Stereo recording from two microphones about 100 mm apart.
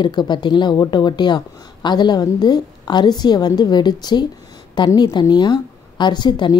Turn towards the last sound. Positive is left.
turn(degrees=45)  # may be behind; listen again after turning